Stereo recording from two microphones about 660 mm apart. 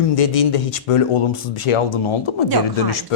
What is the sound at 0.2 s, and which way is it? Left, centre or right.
Speech, left.